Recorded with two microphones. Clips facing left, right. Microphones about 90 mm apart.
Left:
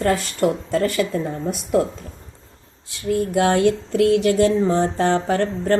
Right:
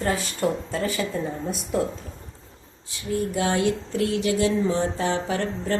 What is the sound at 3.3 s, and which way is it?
Speech, 65° left (ahead or behind).